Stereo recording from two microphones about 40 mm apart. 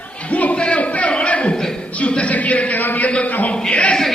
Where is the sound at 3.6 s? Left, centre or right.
Left.